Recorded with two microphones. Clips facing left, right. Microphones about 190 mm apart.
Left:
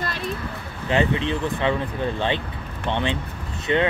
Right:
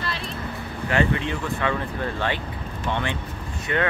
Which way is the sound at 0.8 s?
20° left (ahead or behind).